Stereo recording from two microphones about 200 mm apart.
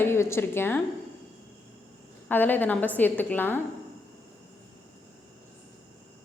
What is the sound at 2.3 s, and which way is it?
A woman's voice, 10° left (ahead or behind).